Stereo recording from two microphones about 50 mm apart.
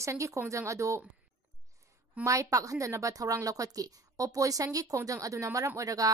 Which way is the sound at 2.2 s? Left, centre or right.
Right.